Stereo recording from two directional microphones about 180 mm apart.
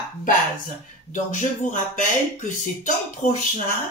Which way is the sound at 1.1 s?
45° left (ahead or behind).